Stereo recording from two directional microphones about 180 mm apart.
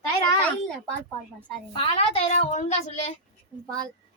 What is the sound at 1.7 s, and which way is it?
A child's voice, 35° left (ahead or behind).